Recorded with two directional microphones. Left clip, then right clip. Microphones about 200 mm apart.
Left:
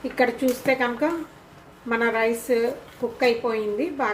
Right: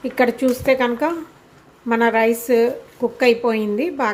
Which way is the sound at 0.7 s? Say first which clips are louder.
Right 5 dB; 35° right (ahead or behind).